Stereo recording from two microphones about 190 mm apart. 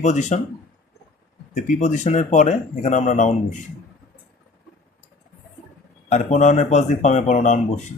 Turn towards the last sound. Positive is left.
turn(degrees=40)  # may be behind; listen again after turning